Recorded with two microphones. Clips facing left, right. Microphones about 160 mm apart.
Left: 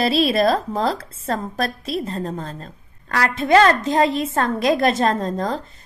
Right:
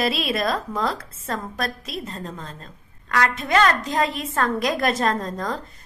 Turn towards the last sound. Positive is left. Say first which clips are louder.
# left 3 dB
turn(degrees=30)  # may be behind; listen again after turning